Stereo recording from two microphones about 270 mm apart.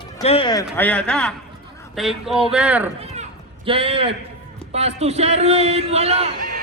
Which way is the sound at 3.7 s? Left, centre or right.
Centre.